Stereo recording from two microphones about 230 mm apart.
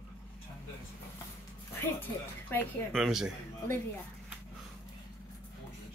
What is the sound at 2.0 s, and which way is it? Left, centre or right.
Speech, centre.